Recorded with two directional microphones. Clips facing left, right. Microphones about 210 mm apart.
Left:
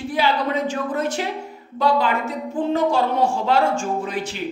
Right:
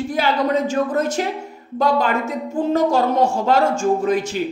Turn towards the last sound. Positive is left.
turn(degrees=-45)  # may be behind; listen again after turning